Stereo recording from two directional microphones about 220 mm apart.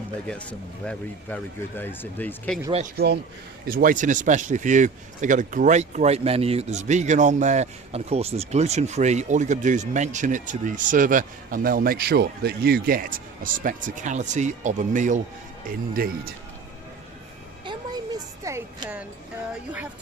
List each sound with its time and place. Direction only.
0.9 s speech: 10° left (ahead or behind)
3.7 s a man's voice: 40° right (ahead or behind)
17.7 s a sound: 15° right (ahead or behind)